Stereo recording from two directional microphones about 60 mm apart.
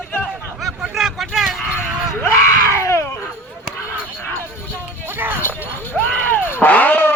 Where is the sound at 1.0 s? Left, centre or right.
Centre.